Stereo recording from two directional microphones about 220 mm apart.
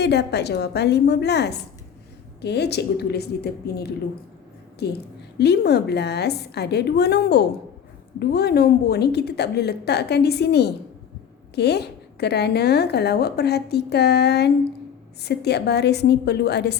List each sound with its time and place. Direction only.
0.0 s a woman's voice: 50° left (ahead or behind)